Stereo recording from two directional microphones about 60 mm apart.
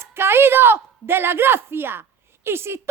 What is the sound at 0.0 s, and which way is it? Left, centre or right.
A woman's voice, right.